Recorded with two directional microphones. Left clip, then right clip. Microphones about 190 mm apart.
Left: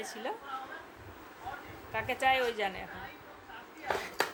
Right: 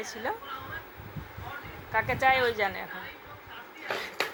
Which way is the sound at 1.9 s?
5° right (ahead or behind).